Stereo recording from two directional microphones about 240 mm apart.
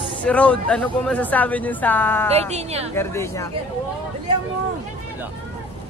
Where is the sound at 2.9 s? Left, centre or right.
Centre.